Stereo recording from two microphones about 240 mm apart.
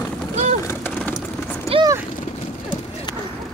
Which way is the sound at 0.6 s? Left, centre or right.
Centre.